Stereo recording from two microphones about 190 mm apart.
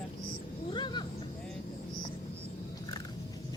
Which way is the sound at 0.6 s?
25° left (ahead or behind).